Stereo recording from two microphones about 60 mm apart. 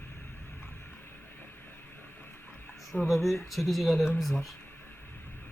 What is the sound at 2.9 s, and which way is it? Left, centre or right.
Speech, left.